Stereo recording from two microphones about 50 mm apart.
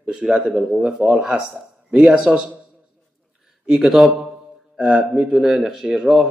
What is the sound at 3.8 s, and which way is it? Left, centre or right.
A man's voice, centre.